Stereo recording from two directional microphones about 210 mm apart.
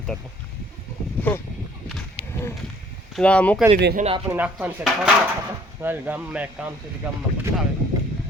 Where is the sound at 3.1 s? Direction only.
5° left (ahead or behind).